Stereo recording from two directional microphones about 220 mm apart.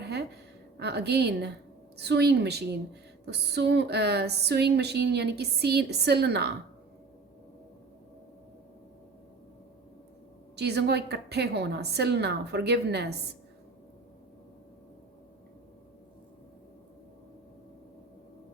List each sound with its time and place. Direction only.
0.8 s a woman's voice: 50° right (ahead or behind)
10.5 s a woman's voice: 50° right (ahead or behind)